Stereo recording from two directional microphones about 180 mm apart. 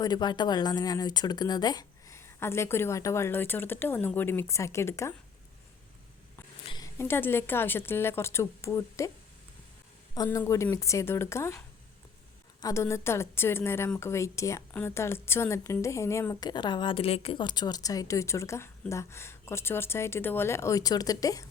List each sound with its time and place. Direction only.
0.0 s a woman's voice: 25° left (ahead or behind)
6.7 s a woman's voice: 20° left (ahead or behind)
10.2 s a woman's voice: 15° left (ahead or behind)
12.6 s a woman's voice: 15° left (ahead or behind)